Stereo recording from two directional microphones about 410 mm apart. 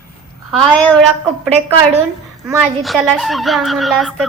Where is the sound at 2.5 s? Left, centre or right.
Centre.